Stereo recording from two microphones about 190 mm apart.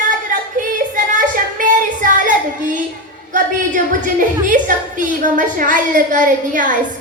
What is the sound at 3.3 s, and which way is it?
A woman's voice, 45° right (ahead or behind).